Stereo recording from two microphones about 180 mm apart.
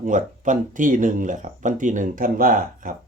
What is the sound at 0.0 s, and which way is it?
Speech, 45° right (ahead or behind).